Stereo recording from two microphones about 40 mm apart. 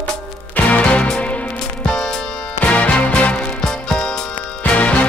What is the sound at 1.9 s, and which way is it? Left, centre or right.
Music, centre.